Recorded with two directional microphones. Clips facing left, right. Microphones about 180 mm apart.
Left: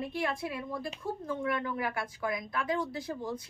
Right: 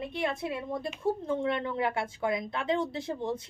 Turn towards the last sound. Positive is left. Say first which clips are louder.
# right 3 dB
turn(degrees=-25)  # may be behind; listen again after turning